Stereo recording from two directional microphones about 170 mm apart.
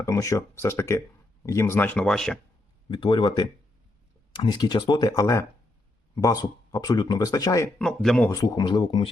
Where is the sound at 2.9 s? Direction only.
25° left (ahead or behind).